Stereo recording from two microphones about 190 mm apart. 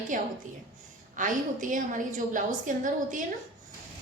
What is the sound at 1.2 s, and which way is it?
A woman's voice, 45° right (ahead or behind).